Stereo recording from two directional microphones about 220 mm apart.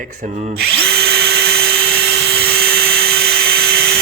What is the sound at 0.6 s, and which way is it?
Drill, 45° right (ahead or behind).